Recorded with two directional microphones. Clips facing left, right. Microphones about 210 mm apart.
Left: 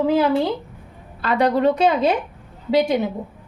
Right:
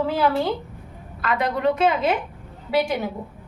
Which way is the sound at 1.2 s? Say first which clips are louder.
Left 4 dB; 35° left (ahead or behind).